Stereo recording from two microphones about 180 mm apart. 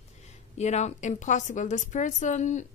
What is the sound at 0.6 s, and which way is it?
Speech, 40° left (ahead or behind).